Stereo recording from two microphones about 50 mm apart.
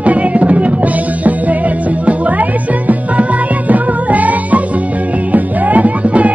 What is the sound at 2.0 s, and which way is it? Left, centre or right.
Music, right.